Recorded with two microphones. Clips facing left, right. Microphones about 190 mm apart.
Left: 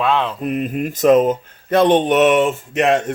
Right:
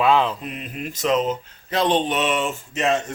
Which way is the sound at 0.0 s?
Centre (ahead or behind).